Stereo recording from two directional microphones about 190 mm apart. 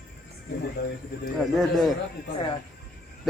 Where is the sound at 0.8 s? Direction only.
60° left (ahead or behind).